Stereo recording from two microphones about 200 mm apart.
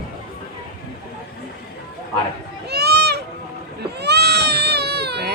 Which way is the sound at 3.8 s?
55° right (ahead or behind).